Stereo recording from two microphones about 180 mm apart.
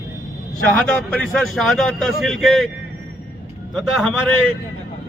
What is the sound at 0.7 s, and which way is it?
A man's voice, 5° left (ahead or behind).